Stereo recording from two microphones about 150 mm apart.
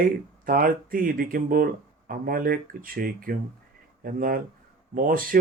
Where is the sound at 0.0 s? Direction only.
70° right (ahead or behind).